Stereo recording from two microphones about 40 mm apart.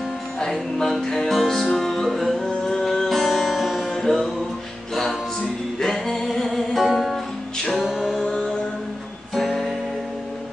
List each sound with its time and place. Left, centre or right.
0.4 s music: centre
3.9 s music: centre
5.8 s music: centre
7.5 s music: centre
7.8 s a capella: centre
8.2 s music: centre
9.3 s music: centre